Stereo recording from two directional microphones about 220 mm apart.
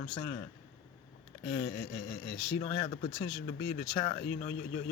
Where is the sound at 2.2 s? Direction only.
50° left (ahead or behind).